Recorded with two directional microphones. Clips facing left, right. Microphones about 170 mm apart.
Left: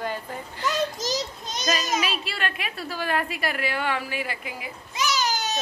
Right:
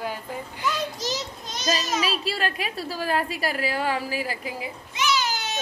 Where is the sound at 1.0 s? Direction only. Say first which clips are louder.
Left 2 dB; 40° left (ahead or behind).